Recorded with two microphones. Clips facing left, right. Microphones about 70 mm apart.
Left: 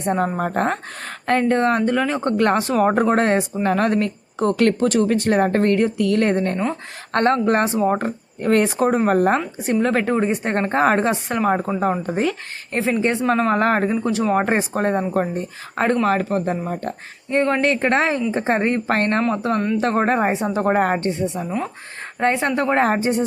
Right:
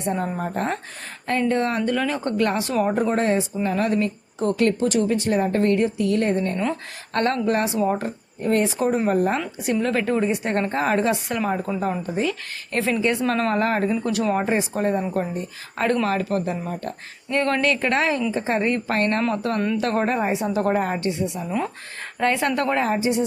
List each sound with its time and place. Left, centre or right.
0.0 s speech: left
7.1 s a woman's voice: left
8.4 s speech: left
9.6 s a woman's voice: left
12.7 s speech: left
13.6 s a woman's voice: left
14.3 s a woman's voice: left
19.3 s a woman's voice: left
20.7 s a woman's voice: left
22.2 s speech: left
22.8 s speech: left